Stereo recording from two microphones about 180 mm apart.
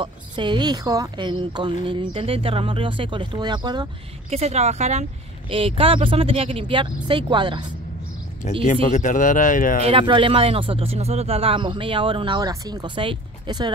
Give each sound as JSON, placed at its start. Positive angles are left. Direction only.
{"t": 0.0, "sound": "speech", "side_deg": -25}
{"t": 4.4, "sound": "a woman's voice", "side_deg": -35}
{"t": 8.6, "sound": "speech", "side_deg": 45}
{"t": 9.8, "sound": "speech", "side_deg": -30}